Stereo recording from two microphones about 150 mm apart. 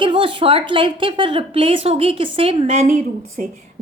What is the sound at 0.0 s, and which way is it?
A woman's voice, 35° right (ahead or behind).